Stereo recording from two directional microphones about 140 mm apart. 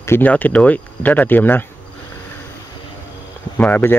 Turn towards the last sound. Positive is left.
turn(degrees=15)  # may be behind; listen again after turning